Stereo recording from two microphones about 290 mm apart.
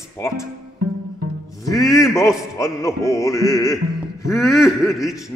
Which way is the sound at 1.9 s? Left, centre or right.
Centre.